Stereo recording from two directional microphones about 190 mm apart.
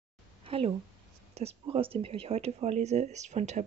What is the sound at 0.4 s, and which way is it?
Speech, 30° right (ahead or behind).